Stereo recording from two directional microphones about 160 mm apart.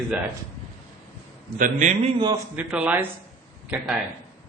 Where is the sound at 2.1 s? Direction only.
30° right (ahead or behind).